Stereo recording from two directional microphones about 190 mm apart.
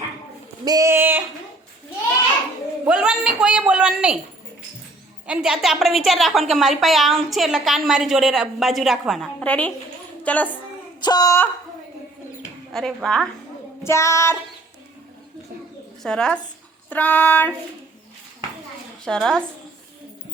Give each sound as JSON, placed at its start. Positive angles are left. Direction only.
{"t": 0.6, "sound": "a sound", "side_deg": -20}
{"t": 2.8, "sound": "a sound", "side_deg": -5}
{"t": 5.2, "sound": "a woman's voice", "side_deg": -5}
{"t": 10.2, "sound": "female singing", "side_deg": 10}
{"t": 11.0, "sound": "speech", "side_deg": 20}
{"t": 12.4, "sound": "bird", "side_deg": 0}
{"t": 13.8, "sound": "female singing", "side_deg": 15}
{"t": 16.0, "sound": "a woman's voice", "side_deg": 5}
{"t": 16.9, "sound": "female singing", "side_deg": 10}
{"t": 19.0, "sound": "a woman's voice", "side_deg": 5}